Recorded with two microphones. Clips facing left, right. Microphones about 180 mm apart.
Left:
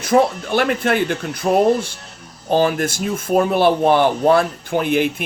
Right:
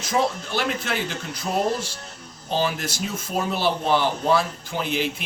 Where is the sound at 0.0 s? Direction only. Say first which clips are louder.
Left 8 dB; 60° left (ahead or behind).